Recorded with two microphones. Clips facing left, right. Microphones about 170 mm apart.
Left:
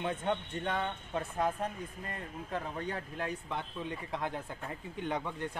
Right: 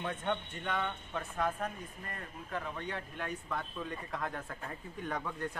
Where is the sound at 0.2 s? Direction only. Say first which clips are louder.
Left 3 dB; 30° left (ahead or behind).